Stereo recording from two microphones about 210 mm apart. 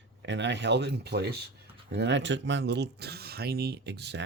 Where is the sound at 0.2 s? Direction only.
55° right (ahead or behind).